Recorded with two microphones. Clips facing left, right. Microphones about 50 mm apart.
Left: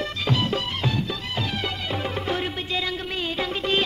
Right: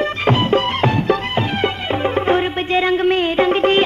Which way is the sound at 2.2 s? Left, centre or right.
Right.